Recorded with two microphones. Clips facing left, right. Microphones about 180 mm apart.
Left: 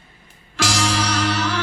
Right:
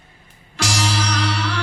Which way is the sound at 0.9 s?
45° left (ahead or behind).